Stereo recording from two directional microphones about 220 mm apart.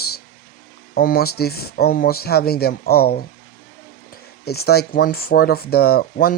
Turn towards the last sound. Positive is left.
turn(degrees=45)  # may be behind; listen again after turning